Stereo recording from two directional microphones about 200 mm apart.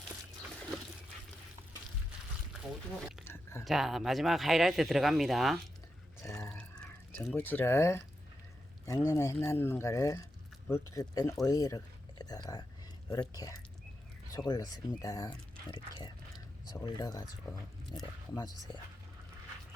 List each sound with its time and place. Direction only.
3.6 s speech: centre (ahead or behind)
6.2 s a sound: 15° left (ahead or behind)
6.5 s drip: 5° left (ahead or behind)
8.9 s speech: 15° left (ahead or behind)